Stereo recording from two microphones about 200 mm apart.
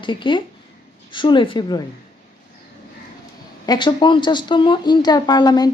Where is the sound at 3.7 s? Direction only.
25° left (ahead or behind).